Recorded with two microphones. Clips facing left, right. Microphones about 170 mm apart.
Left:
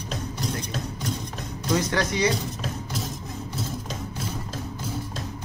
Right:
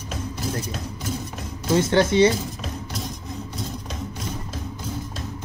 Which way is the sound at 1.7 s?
25° right (ahead or behind).